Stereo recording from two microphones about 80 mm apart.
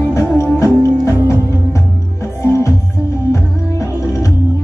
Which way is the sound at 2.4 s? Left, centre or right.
Left.